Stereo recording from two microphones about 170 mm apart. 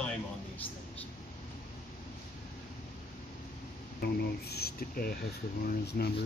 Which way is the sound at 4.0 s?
70° left (ahead or behind).